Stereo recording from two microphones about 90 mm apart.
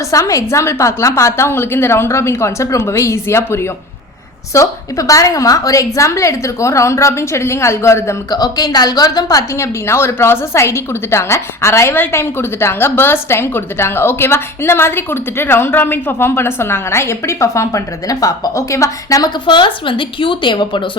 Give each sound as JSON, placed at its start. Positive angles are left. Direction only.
{"t": 0.1, "sound": "a woman's voice", "side_deg": 35}
{"t": 8.3, "sound": "a woman's voice", "side_deg": 50}
{"t": 9.6, "sound": "a woman's voice", "side_deg": 30}
{"t": 19.5, "sound": "a woman's voice", "side_deg": 65}